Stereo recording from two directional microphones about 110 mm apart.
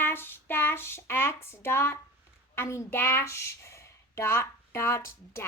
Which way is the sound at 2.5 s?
25° left (ahead or behind).